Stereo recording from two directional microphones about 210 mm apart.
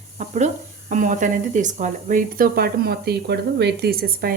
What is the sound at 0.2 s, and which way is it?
Speech, 35° right (ahead or behind).